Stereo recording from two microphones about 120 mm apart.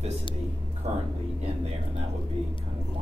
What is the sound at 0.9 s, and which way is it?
Speech, 70° right (ahead or behind).